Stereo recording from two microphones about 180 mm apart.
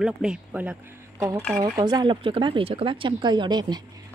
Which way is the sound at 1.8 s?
20° right (ahead or behind).